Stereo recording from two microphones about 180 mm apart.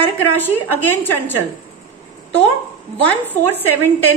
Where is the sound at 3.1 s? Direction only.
10° left (ahead or behind).